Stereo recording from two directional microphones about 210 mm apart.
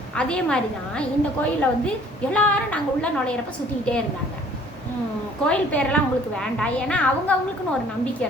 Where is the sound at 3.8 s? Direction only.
5° left (ahead or behind).